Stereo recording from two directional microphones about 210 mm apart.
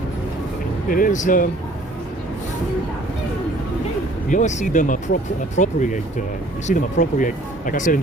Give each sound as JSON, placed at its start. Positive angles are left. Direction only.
{"t": 0.9, "sound": "speech", "side_deg": 40}
{"t": 4.3, "sound": "speech", "side_deg": 35}